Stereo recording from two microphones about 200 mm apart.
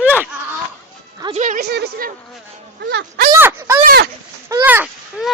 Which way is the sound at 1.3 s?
40° right (ahead or behind).